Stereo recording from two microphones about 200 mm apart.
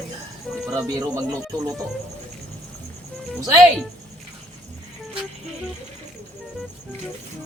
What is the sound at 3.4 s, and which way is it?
Speech, 20° right (ahead or behind).